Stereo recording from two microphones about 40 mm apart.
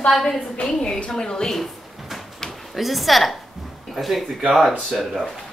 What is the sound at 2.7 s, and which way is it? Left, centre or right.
A woman's voice, centre.